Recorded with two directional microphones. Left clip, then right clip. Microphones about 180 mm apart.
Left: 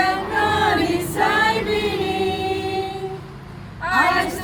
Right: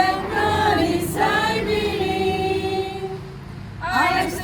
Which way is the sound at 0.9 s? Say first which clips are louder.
Left 1 dB; centre (ahead or behind).